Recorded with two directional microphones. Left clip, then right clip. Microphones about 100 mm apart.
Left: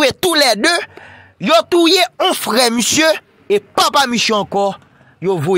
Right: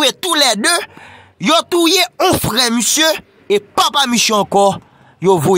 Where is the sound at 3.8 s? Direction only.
30° left (ahead or behind).